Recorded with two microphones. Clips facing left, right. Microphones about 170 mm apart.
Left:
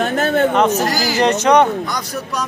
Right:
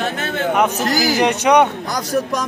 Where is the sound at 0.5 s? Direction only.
10° right (ahead or behind).